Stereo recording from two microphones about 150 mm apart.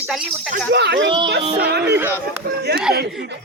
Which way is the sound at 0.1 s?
5° right (ahead or behind).